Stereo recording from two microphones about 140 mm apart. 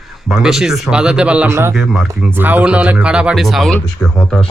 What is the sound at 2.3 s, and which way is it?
Speech, 10° right (ahead or behind).